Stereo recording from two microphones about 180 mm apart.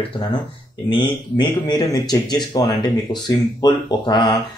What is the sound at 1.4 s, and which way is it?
Speech, 25° left (ahead or behind).